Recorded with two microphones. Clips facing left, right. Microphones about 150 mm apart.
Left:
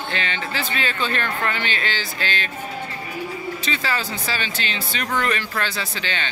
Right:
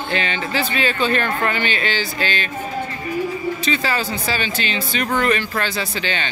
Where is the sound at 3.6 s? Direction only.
5° right (ahead or behind).